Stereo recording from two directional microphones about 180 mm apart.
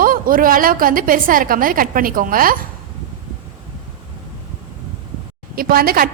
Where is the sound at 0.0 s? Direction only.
50° right (ahead or behind).